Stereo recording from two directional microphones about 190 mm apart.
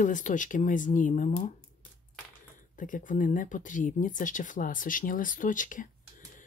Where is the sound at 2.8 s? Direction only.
45° left (ahead or behind).